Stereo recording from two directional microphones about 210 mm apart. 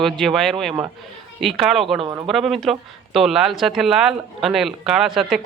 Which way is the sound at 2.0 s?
20° right (ahead or behind).